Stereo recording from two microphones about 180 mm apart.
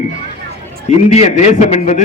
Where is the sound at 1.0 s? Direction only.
40° left (ahead or behind).